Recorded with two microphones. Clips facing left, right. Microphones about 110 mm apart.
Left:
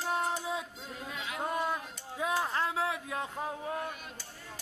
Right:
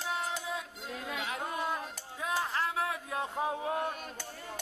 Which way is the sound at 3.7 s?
35° right (ahead or behind).